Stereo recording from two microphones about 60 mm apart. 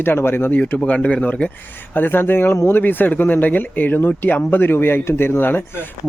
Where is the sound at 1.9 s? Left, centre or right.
Left.